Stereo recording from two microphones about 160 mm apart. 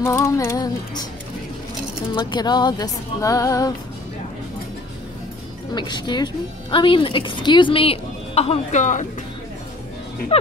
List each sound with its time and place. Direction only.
0.0 s music: 20° left (ahead or behind)
2.1 s music: 25° left (ahead or behind)
5.8 s speech: 30° left (ahead or behind); by 9.0 s 50° left (ahead or behind)